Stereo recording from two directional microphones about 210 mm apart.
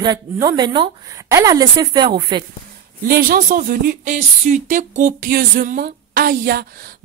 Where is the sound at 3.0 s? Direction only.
45° right (ahead or behind).